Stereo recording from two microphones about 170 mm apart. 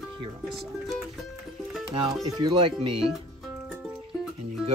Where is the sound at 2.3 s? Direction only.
30° right (ahead or behind).